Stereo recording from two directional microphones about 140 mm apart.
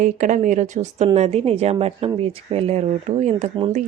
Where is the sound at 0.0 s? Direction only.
60° right (ahead or behind).